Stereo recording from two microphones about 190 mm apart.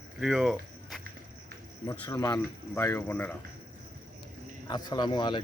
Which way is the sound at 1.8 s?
15° left (ahead or behind).